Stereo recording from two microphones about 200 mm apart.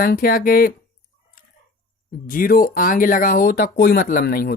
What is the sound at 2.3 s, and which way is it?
Speech, 45° left (ahead or behind).